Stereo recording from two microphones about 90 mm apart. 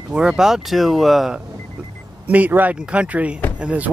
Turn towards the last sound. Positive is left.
turn(degrees=-15)  # may be behind; listen again after turning